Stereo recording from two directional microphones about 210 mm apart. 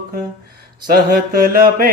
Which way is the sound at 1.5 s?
45° right (ahead or behind).